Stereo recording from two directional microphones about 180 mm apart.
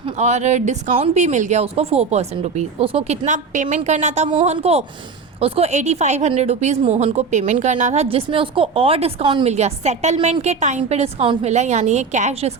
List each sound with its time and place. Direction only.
0.2 s a woman's voice: 40° right (ahead or behind)